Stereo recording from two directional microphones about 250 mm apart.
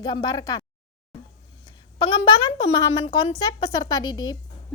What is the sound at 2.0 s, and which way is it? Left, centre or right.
A woman's voice, centre.